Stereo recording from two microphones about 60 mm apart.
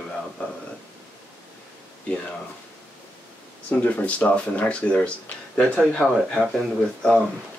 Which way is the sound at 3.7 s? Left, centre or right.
Left.